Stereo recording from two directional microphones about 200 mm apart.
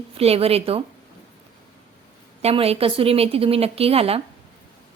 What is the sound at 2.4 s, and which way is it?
A woman's voice, 30° right (ahead or behind).